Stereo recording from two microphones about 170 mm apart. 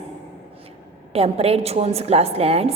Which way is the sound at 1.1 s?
35° right (ahead or behind).